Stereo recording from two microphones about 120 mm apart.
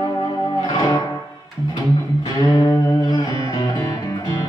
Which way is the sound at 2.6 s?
35° left (ahead or behind).